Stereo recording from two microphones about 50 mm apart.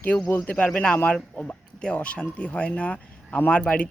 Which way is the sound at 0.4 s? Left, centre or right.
Left.